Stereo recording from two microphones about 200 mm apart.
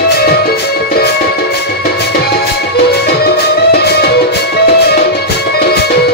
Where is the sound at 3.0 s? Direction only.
55° left (ahead or behind).